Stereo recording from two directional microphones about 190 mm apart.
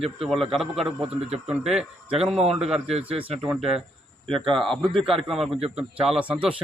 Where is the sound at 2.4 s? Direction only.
35° right (ahead or behind).